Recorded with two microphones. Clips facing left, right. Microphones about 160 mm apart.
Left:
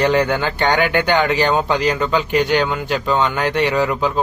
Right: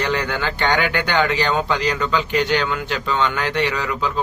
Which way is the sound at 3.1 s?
40° left (ahead or behind).